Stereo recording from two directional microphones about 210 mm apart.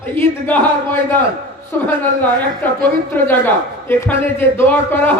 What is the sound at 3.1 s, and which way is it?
A man's voice, 10° left (ahead or behind).